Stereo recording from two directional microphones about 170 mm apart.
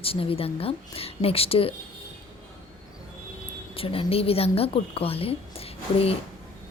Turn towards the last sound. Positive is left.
turn(degrees=35)  # may be behind; listen again after turning